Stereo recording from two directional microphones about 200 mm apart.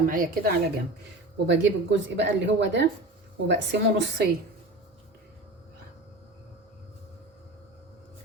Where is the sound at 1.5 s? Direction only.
60° right (ahead or behind).